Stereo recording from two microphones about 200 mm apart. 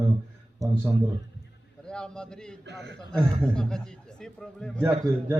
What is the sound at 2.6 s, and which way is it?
Speech, 60° right (ahead or behind).